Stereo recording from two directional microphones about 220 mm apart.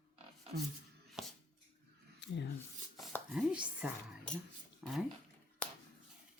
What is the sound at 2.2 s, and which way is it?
Rub, 50° left (ahead or behind).